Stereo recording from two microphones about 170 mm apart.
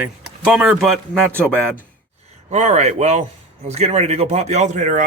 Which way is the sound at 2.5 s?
40° right (ahead or behind).